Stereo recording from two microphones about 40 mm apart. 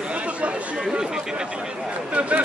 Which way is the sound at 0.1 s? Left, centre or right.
Right.